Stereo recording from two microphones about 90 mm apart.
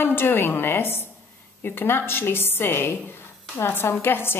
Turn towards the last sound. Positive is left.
turn(degrees=25)  # may be behind; listen again after turning